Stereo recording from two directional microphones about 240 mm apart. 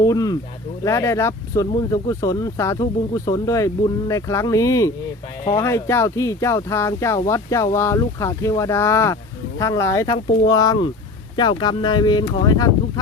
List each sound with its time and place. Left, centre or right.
0.0 s speech: centre